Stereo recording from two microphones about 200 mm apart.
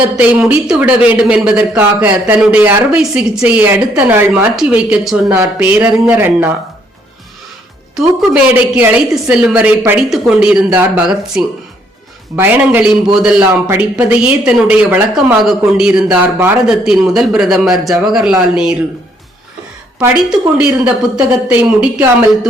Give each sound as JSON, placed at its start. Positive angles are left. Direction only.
{"t": 0.2, "sound": "speech", "side_deg": -5}
{"t": 7.9, "sound": "a man's voice", "side_deg": -5}
{"t": 20.6, "sound": "a man's voice", "side_deg": -5}